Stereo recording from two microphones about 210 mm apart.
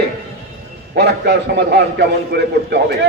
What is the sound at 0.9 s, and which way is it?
A man's voice, 50° right (ahead or behind).